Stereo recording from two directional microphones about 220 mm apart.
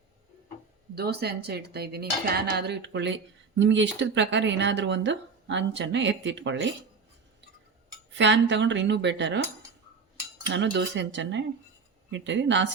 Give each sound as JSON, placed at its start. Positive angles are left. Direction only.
{"t": 0.9, "sound": "cutlery", "side_deg": -45}
{"t": 3.6, "sound": "speech", "side_deg": -55}
{"t": 8.1, "sound": "speech", "side_deg": -55}
{"t": 10.5, "sound": "cutlery", "side_deg": -55}
{"t": 12.1, "sound": "speech", "side_deg": -55}